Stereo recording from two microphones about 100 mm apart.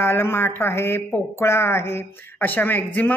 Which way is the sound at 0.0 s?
25° left (ahead or behind).